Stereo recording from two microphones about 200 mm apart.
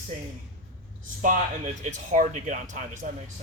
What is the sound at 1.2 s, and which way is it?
Speech, 40° right (ahead or behind).